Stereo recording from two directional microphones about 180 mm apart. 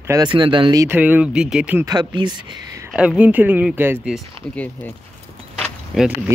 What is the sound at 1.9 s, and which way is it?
Speech, 25° right (ahead or behind).